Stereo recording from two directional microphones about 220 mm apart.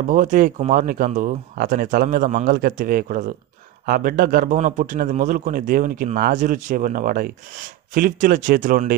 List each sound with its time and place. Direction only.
0.0 s a man's voice: 35° right (ahead or behind)